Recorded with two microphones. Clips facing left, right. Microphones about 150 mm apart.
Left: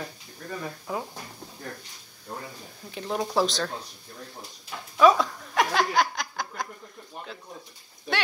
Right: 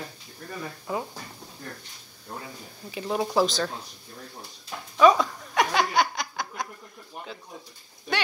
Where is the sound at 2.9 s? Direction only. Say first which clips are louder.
Right 2 dB; 5° right (ahead or behind).